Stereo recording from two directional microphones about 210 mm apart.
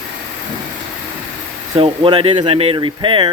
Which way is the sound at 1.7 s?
25° right (ahead or behind).